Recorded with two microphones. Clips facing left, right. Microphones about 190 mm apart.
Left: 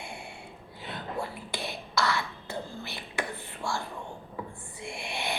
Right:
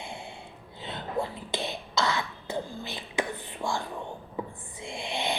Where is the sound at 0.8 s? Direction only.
20° right (ahead or behind).